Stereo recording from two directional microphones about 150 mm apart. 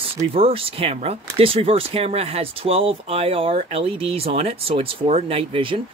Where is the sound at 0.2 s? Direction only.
40° right (ahead or behind).